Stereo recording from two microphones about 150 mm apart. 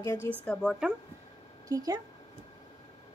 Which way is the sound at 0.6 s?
5° right (ahead or behind).